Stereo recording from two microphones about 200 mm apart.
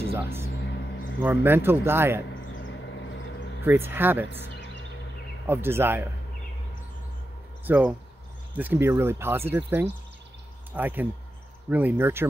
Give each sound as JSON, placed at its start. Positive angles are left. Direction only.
{"t": 0.1, "sound": "speech", "side_deg": -10}
{"t": 2.7, "sound": "a sound", "side_deg": 65}
{"t": 3.6, "sound": "speech", "side_deg": -10}
{"t": 5.5, "sound": "speech", "side_deg": -10}
{"t": 7.6, "sound": "speech", "side_deg": -10}